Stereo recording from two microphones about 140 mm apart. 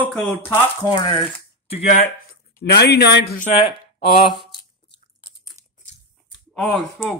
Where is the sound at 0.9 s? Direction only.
35° left (ahead or behind).